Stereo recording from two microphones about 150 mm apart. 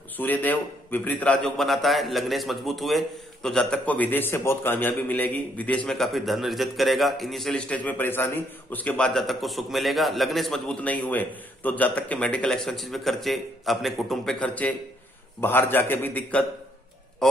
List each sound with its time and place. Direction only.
0.2 s a man's voice: 10° left (ahead or behind)
17.2 s honk: 5° left (ahead or behind)